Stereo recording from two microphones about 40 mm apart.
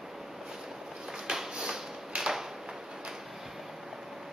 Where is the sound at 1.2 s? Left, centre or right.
Centre.